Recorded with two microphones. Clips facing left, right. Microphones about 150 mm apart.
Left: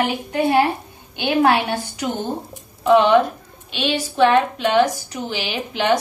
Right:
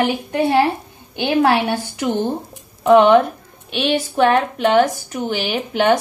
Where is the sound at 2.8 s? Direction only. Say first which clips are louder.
Right 3 dB; 55° right (ahead or behind).